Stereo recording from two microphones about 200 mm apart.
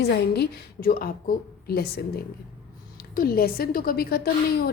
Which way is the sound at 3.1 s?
45° left (ahead or behind).